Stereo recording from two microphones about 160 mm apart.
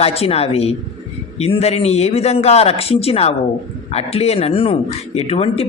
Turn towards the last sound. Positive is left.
turn(degrees=40)  # may be behind; listen again after turning